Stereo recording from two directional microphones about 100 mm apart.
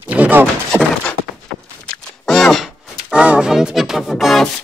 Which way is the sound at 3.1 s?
10° right (ahead or behind).